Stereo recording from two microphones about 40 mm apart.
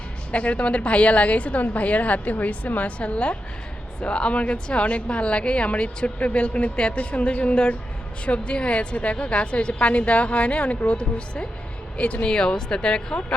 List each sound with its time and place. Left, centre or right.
0.3 s a woman's voice: left
12.3 s speech: centre